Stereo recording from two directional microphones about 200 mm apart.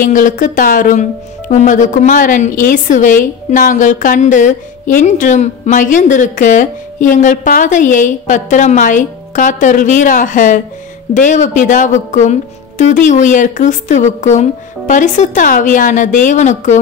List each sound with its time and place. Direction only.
0.0 s a woman's voice: 40° left (ahead or behind)